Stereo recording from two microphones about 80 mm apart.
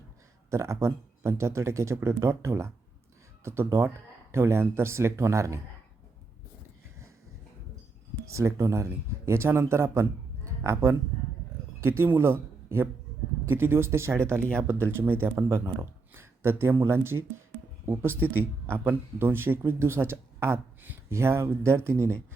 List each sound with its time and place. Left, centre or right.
0.5 s speech: right
8.3 s speech: right
16.1 s a sound: right
16.9 s speech: right